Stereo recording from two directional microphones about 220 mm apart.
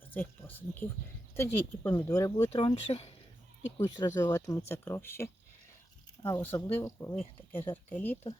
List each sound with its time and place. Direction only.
0.1 s speech: 10° left (ahead or behind)
2.5 s speech: 25° left (ahead or behind)
3.8 s speech: 15° left (ahead or behind)